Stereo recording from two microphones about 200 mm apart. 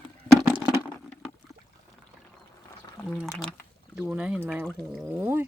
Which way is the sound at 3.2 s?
Centre (ahead or behind).